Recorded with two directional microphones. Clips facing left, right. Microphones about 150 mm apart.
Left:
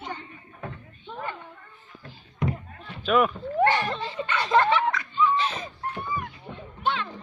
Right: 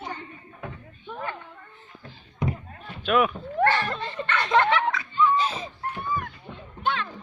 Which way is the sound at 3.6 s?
15° left (ahead or behind).